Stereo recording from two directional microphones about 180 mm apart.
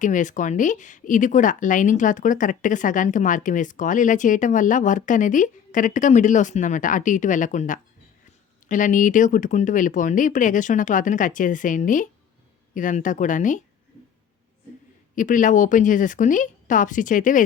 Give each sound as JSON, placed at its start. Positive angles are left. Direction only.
{"t": 0.0, "sound": "a woman's voice", "side_deg": 45}
{"t": 15.1, "sound": "a woman's voice", "side_deg": 45}